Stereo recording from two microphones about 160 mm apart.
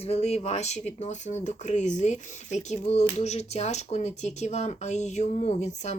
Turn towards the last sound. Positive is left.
turn(degrees=45)  # may be behind; listen again after turning